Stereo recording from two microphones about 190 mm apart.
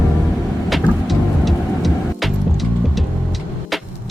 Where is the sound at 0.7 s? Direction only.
Centre (ahead or behind).